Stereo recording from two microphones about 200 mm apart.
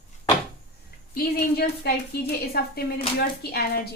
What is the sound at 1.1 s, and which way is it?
Speech, 50° left (ahead or behind).